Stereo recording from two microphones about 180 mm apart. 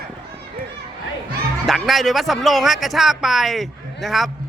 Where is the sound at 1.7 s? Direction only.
Centre (ahead or behind).